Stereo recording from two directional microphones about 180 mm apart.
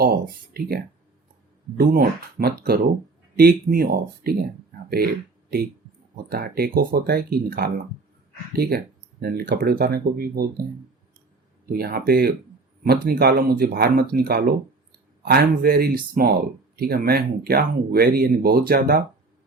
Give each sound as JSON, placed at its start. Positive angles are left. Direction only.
{"t": 0.0, "sound": "speech", "side_deg": -55}
{"t": 6.2, "sound": "speech", "side_deg": -55}
{"t": 11.7, "sound": "speech", "side_deg": -55}